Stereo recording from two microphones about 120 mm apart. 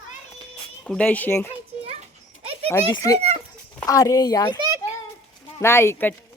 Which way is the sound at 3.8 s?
30° left (ahead or behind).